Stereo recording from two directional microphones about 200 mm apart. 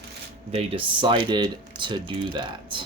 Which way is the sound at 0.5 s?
25° right (ahead or behind).